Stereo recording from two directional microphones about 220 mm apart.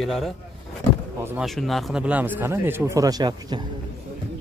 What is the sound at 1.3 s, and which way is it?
Speech, centre (ahead or behind).